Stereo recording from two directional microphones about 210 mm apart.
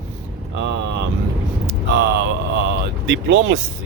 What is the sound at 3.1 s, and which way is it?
Speech, 65° right (ahead or behind).